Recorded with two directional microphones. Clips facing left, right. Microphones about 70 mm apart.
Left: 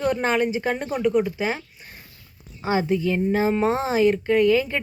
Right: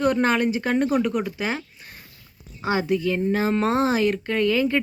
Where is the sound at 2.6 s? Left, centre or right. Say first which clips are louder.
Left 1 dB; left.